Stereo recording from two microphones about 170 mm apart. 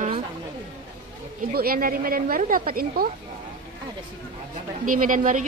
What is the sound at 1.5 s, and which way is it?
A woman's voice, 60° right (ahead or behind).